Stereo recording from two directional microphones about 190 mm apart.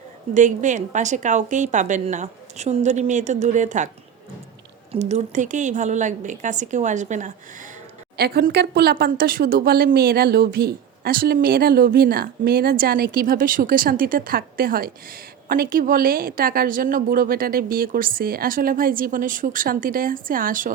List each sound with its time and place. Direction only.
0.3 s a woman's voice: 40° right (ahead or behind)
4.9 s a woman's voice: 35° right (ahead or behind)
8.1 s speech: 55° right (ahead or behind)